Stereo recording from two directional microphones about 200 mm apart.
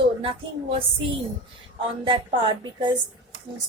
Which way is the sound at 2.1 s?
25° right (ahead or behind).